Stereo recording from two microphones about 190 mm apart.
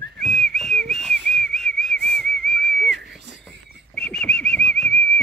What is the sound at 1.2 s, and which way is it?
Whistle, centre (ahead or behind).